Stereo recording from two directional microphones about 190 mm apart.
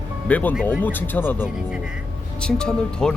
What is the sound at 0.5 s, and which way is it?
Speech, 5° right (ahead or behind).